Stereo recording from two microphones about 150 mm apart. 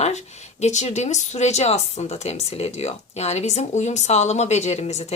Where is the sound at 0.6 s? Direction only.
50° left (ahead or behind).